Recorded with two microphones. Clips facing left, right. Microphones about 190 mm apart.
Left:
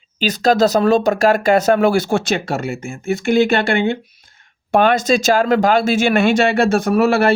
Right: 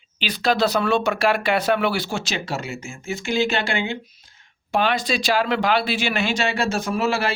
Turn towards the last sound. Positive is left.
turn(degrees=55)  # may be behind; listen again after turning